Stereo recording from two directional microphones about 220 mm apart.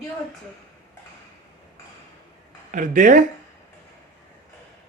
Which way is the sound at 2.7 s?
35° right (ahead or behind).